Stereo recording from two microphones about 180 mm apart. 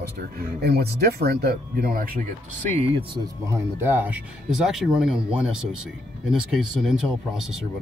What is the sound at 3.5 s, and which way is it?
Speech, 10° right (ahead or behind).